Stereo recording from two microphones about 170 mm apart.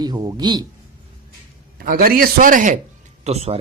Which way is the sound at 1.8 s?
60° right (ahead or behind).